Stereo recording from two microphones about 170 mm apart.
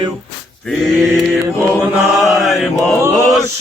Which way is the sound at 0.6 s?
Centre (ahead or behind).